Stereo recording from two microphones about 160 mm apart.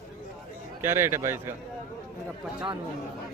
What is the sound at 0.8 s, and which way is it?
Speech, 15° right (ahead or behind).